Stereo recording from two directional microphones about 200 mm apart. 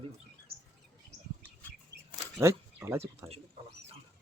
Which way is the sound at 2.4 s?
15° right (ahead or behind).